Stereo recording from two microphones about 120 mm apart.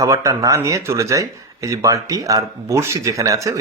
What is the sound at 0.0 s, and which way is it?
Speech, 25° right (ahead or behind).